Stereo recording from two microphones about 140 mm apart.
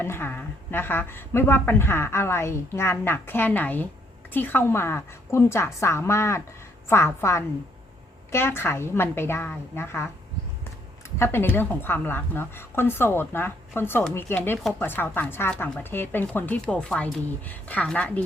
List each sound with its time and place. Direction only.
0.0 s a woman's voice: 15° left (ahead or behind)
11.2 s a woman's voice: 15° left (ahead or behind)